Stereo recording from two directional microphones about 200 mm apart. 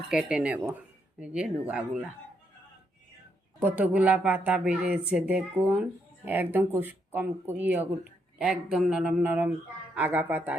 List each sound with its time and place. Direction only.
0.1 s speech: 5° right (ahead or behind)
3.6 s speech: 10° right (ahead or behind)